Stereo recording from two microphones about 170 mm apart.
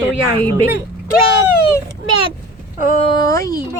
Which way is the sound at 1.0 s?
60° left (ahead or behind).